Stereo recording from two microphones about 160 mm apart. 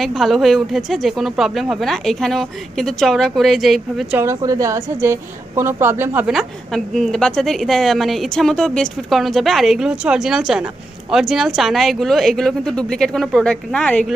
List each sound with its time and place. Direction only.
0.0 s a woman's voice: centre (ahead or behind)
4.2 s a woman's voice: 20° right (ahead or behind)
6.3 s a woman's voice: centre (ahead or behind)